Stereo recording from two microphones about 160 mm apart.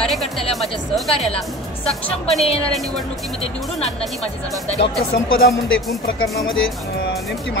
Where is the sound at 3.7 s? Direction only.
Centre (ahead or behind).